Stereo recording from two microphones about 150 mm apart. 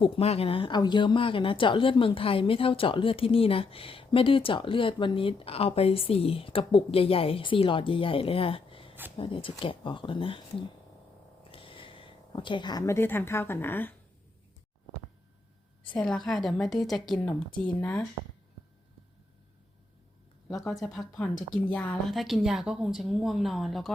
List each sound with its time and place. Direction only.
0.0 s speech: 40° left (ahead or behind)
11.5 s speech: 35° left (ahead or behind); by 13.9 s 15° left (ahead or behind)
16.0 s a woman's voice: 5° left (ahead or behind)
20.5 s a woman's voice: centre (ahead or behind)